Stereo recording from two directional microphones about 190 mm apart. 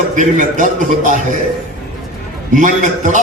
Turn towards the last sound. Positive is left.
turn(degrees=-40)  # may be behind; listen again after turning